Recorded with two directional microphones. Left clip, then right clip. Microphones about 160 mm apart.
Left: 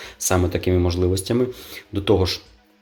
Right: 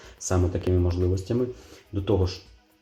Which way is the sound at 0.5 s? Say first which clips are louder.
Left 6 dB; 35° left (ahead or behind).